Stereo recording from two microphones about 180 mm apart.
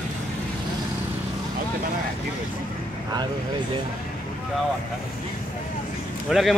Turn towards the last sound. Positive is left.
turn(degrees=0)  # may be behind; listen again after turning